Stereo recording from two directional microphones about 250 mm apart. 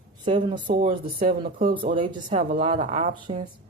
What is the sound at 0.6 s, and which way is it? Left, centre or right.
Speech, right.